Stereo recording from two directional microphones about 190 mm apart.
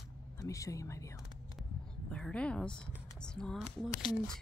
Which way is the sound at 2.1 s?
5° left (ahead or behind).